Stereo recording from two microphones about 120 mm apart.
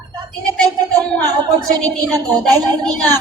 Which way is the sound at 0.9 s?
30° right (ahead or behind).